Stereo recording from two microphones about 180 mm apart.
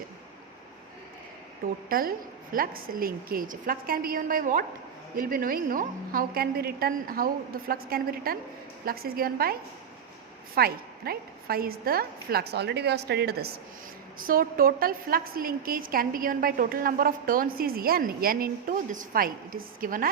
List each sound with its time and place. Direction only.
1.9 s a woman's voice: 55° right (ahead or behind)
14.2 s a woman's voice: 50° right (ahead or behind)